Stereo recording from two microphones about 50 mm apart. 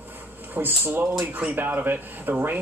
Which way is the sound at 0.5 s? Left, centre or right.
Right.